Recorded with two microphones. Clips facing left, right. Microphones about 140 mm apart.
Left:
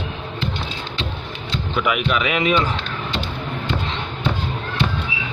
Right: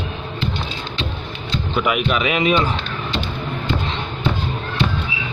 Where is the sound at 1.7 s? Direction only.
30° right (ahead or behind).